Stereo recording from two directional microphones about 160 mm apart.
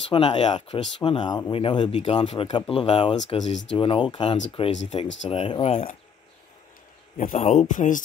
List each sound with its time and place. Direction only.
0.1 s speech: 30° left (ahead or behind)
7.2 s speech: 45° left (ahead or behind)